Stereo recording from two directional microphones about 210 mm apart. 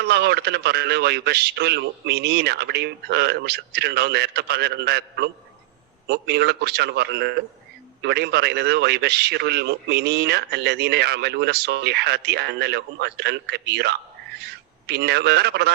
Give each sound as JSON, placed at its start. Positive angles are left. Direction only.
{"t": 0.0, "sound": "a man's voice", "side_deg": -50}